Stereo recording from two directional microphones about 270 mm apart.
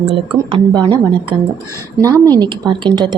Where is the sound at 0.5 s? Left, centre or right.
Centre.